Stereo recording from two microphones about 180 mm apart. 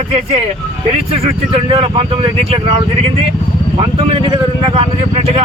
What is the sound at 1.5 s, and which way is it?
Speech, 30° right (ahead or behind).